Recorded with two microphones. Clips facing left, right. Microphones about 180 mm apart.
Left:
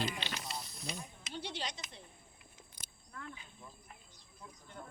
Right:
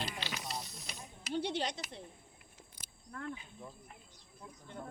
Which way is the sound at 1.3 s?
55° right (ahead or behind).